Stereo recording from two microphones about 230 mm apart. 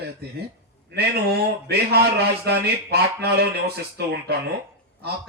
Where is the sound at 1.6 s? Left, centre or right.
Right.